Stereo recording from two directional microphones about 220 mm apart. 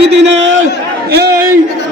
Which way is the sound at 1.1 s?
45° right (ahead or behind).